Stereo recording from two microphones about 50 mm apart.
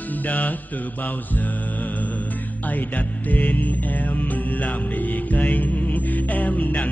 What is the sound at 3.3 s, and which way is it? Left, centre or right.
Music, left.